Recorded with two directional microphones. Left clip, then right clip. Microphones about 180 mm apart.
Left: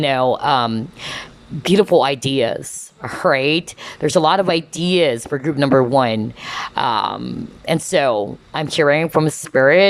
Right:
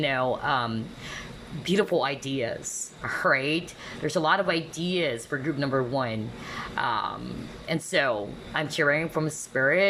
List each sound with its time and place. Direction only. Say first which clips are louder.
0.0 s speech: left 10 dB; 25° left (ahead or behind)